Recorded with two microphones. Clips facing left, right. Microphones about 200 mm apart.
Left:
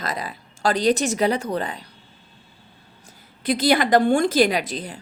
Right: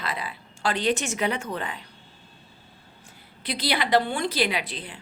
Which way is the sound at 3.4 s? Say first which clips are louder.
Left 8 dB; 45° left (ahead or behind).